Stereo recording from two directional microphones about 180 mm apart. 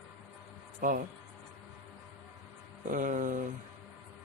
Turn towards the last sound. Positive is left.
turn(degrees=-45)  # may be behind; listen again after turning